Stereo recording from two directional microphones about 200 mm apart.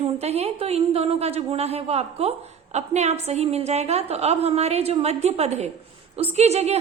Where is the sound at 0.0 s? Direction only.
30° right (ahead or behind).